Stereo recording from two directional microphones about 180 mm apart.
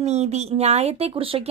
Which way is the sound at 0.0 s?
35° right (ahead or behind).